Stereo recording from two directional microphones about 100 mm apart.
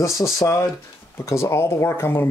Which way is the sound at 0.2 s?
30° left (ahead or behind).